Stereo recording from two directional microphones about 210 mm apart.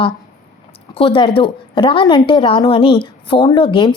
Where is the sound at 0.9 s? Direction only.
25° left (ahead or behind).